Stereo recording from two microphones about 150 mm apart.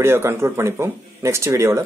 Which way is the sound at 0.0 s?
15° right (ahead or behind).